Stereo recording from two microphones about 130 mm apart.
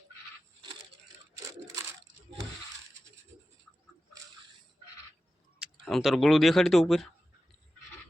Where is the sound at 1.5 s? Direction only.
25° right (ahead or behind).